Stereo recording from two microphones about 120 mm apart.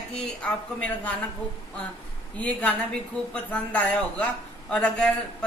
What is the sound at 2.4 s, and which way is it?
A man's voice, 10° left (ahead or behind).